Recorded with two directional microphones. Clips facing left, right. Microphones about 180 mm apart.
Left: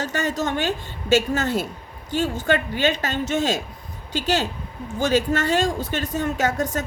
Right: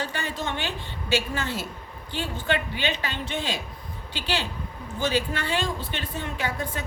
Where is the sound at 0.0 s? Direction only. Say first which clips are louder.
Left 6 dB; 45° left (ahead or behind).